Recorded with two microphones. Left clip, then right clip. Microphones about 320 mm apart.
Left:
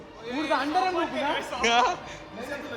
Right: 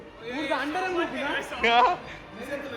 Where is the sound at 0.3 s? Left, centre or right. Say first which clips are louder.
Left 3 dB; left.